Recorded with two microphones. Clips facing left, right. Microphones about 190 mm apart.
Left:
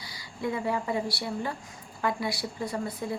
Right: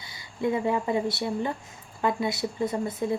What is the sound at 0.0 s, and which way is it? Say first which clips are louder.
A woman's voice: right 4 dB; 25° right (ahead or behind).